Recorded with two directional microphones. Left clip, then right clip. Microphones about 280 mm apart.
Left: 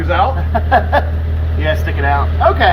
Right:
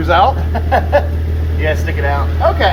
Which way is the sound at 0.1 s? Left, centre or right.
Right.